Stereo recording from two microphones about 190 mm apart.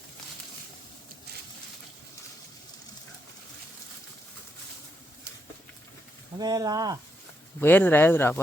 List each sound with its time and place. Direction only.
6.4 s speech: 20° right (ahead or behind)
7.6 s speech: 10° left (ahead or behind)